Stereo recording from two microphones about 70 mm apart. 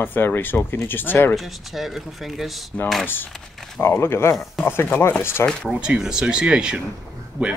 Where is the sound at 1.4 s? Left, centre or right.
Centre.